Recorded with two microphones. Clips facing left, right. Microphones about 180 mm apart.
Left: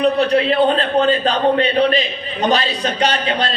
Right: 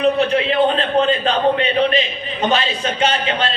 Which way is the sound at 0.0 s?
35° left (ahead or behind).